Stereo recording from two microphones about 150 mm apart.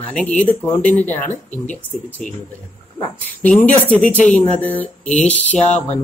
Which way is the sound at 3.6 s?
10° left (ahead or behind).